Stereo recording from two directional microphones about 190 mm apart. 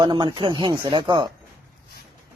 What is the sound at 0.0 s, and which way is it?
Speech, 25° right (ahead or behind).